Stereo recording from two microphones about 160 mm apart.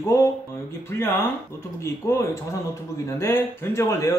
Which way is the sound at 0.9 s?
15° left (ahead or behind).